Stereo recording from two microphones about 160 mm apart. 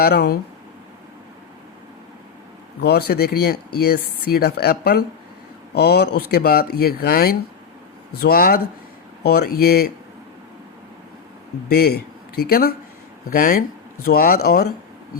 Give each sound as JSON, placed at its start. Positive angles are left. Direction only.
{"t": 0.0, "sound": "speech", "side_deg": 80}
{"t": 2.8, "sound": "speech", "side_deg": 80}
{"t": 5.7, "sound": "speech", "side_deg": 90}
{"t": 9.2, "sound": "speech", "side_deg": 80}
{"t": 11.7, "sound": "speech", "side_deg": 75}